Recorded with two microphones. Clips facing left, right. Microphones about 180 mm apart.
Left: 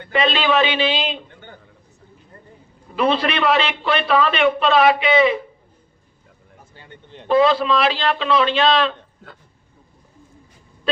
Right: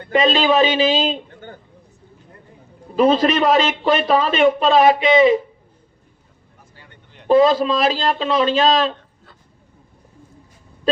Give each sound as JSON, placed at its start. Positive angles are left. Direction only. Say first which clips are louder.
{"t": 0.0, "sound": "a man's voice", "louder": "right 3 dB", "side_deg": -40}
{"t": 2.9, "sound": "a man's voice", "louder": "right 5 dB", "side_deg": -40}
{"t": 6.7, "sound": "vehicle", "louder": "left 7 dB", "side_deg": 25}
{"t": 7.3, "sound": "a man's voice", "louder": "right 2 dB", "side_deg": -40}